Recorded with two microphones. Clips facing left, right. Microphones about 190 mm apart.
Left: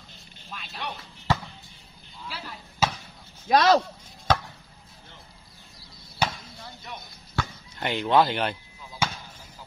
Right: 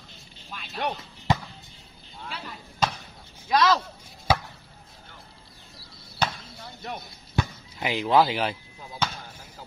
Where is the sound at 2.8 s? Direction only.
5° left (ahead or behind).